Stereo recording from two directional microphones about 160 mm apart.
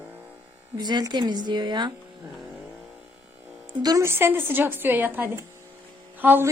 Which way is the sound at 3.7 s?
25° right (ahead or behind).